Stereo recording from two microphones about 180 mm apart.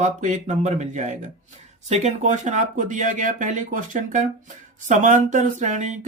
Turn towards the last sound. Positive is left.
turn(degrees=-40)  # may be behind; listen again after turning